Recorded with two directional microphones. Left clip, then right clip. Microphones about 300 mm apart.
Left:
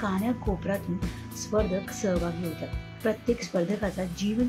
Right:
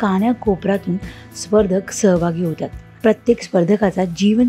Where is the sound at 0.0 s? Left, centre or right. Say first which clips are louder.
Right 12 dB; right.